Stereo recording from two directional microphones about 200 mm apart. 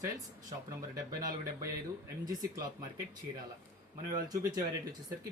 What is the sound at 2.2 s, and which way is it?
Speech, 20° right (ahead or behind).